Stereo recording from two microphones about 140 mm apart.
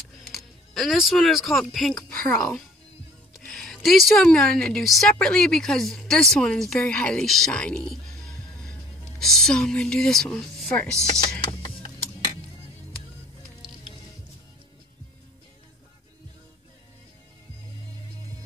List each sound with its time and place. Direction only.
0.2 s speech: centre (ahead or behind)
3.3 s a woman's voice: centre (ahead or behind)
9.2 s a woman's voice: centre (ahead or behind)